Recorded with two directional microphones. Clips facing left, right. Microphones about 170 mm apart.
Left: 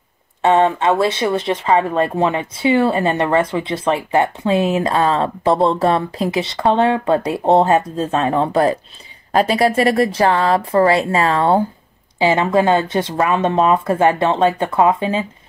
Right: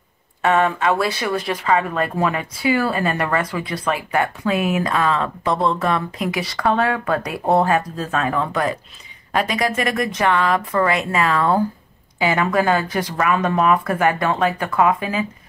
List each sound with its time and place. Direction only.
0.4 s speech: 25° left (ahead or behind)